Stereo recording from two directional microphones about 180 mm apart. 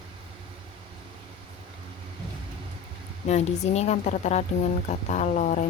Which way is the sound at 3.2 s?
40° left (ahead or behind).